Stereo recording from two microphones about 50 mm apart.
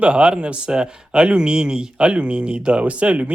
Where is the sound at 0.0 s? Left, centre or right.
Right.